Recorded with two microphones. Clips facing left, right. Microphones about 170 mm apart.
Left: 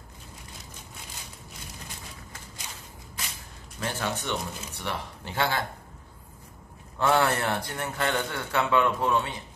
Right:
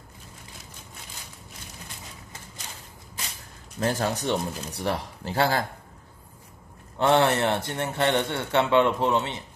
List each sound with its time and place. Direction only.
3.8 s speech: 40° right (ahead or behind)
7.0 s a man's voice: 25° right (ahead or behind)